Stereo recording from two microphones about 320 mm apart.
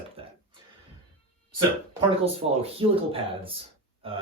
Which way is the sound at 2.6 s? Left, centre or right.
Centre.